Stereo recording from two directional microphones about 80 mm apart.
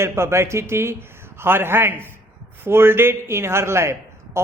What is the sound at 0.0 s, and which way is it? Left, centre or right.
Speech, right.